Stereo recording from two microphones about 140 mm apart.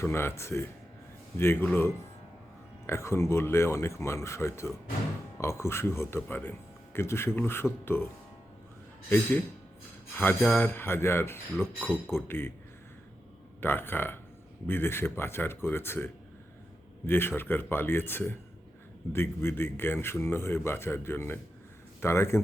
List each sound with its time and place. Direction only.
0.0 s speech: 20° left (ahead or behind)
9.0 s speech: 15° left (ahead or behind)
13.6 s speech: 15° left (ahead or behind)
17.1 s speech: 15° left (ahead or behind)